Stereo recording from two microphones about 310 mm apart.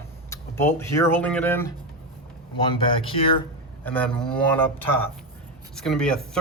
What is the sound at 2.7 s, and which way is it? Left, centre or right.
Speech, centre.